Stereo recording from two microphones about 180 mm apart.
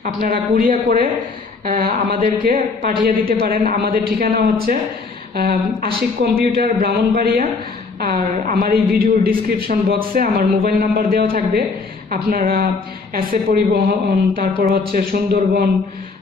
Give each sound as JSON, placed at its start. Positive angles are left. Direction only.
{"t": 0.0, "sound": "a woman's voice", "side_deg": -45}